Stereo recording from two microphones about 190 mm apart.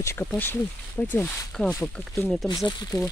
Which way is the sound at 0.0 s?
15° left (ahead or behind).